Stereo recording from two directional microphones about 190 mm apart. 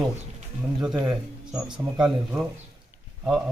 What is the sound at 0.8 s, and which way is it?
Speech, 5° right (ahead or behind).